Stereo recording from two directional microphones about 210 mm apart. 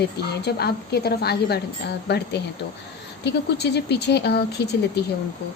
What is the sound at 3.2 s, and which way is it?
Speech, 55° left (ahead or behind).